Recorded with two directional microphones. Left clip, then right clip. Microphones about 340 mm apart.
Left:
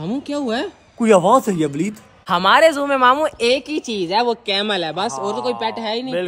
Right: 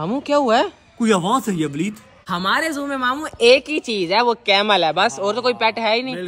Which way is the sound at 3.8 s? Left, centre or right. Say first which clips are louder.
Right 1 dB; centre.